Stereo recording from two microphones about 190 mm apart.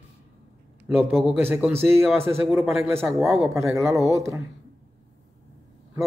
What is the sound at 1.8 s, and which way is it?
Speech, centre (ahead or behind).